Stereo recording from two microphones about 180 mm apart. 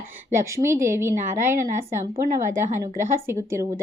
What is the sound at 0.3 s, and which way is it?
Speech, 15° right (ahead or behind).